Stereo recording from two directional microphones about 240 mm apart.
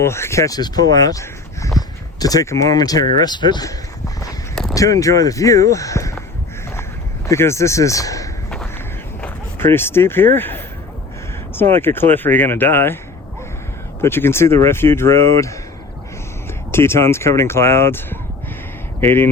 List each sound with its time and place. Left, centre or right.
0.0 s speech: centre
7.3 s speech: centre
11.7 s speech: centre
14.0 s speech: centre
16.7 s speech: centre